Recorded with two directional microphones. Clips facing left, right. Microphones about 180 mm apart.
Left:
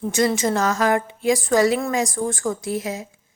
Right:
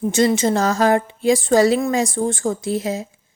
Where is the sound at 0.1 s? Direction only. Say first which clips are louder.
Right 3 dB; 25° right (ahead or behind).